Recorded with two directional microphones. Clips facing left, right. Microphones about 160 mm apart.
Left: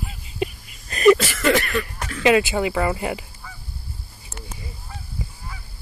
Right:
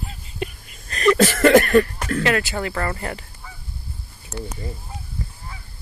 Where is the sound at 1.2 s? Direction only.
50° right (ahead or behind).